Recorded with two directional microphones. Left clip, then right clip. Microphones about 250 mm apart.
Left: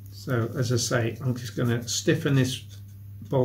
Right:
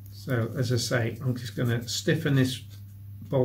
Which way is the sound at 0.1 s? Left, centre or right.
Centre.